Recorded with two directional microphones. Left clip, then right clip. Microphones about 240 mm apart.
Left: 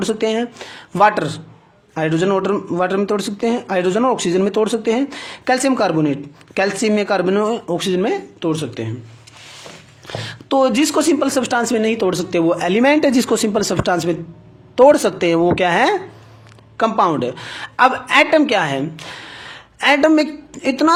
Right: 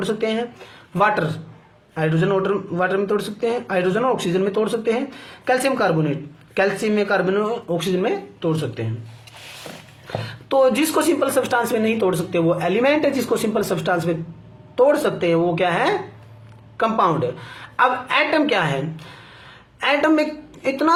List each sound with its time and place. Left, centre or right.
0.0 s speech: left
10.5 s speech: left